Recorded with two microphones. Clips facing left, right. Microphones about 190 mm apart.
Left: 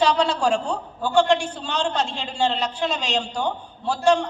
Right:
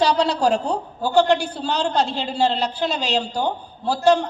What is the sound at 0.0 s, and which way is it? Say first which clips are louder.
A man's voice: right 2 dB; 40° right (ahead or behind).